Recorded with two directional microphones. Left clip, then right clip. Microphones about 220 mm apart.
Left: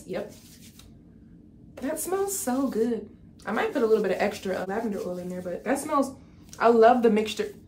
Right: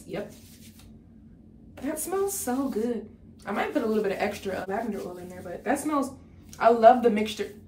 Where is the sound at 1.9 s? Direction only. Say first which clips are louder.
Even; 20° left (ahead or behind).